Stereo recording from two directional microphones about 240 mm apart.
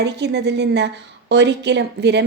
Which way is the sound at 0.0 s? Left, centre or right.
Right.